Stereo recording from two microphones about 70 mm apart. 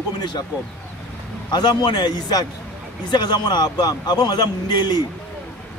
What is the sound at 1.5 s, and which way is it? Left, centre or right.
A man's voice, left.